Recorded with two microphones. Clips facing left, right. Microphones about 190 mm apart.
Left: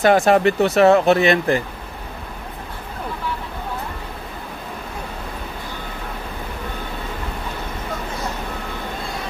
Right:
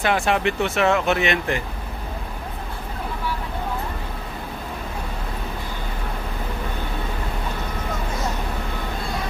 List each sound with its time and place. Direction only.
0.0 s speech: 40° left (ahead or behind)